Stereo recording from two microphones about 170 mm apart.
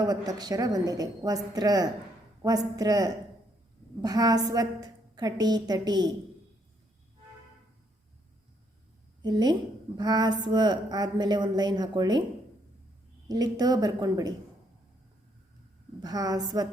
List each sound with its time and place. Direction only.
0.0 s a woman's voice: 20° right (ahead or behind)
9.2 s a woman's voice: 25° right (ahead or behind)
13.2 s a woman's voice: 25° right (ahead or behind)
16.0 s a woman's voice: 25° right (ahead or behind)